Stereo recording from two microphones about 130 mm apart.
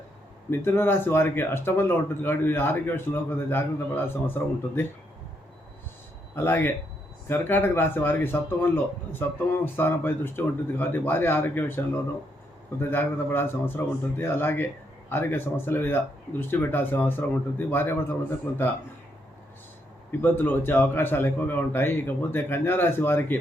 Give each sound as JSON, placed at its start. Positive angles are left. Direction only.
{"t": 0.5, "sound": "speech", "side_deg": 15}
{"t": 6.3, "sound": "speech", "side_deg": 15}
{"t": 20.1, "sound": "speech", "side_deg": 15}